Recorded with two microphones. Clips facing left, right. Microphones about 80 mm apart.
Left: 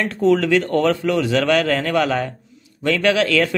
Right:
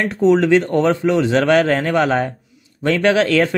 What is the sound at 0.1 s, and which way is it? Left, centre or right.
Speech, right.